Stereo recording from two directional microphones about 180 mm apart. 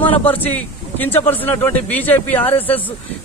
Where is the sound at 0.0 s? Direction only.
10° left (ahead or behind).